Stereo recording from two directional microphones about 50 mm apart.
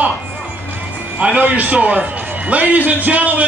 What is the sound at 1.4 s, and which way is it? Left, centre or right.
A man's voice, right.